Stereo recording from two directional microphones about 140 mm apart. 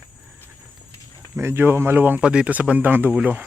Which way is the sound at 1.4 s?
15° right (ahead or behind).